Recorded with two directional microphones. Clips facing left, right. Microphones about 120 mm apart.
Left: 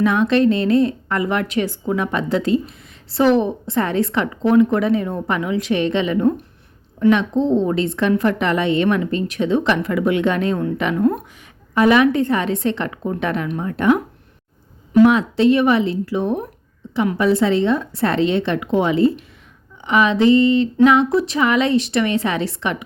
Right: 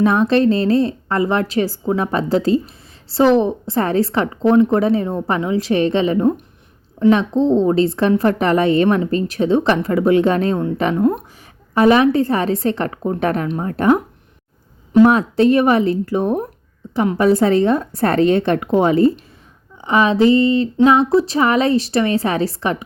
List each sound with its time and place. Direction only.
0.0 s a woman's voice: 35° right (ahead or behind)